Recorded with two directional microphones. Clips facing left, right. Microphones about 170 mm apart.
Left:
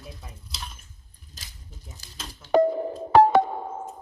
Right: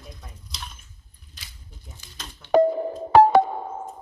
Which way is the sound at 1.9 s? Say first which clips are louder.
Even; 40° left (ahead or behind).